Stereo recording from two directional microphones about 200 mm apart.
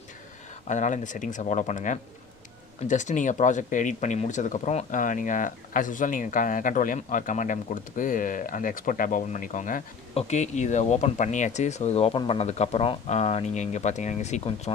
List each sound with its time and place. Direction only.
0.7 s speech: 40° left (ahead or behind)